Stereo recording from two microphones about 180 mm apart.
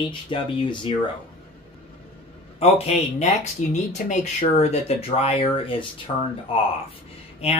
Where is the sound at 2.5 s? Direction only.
35° left (ahead or behind).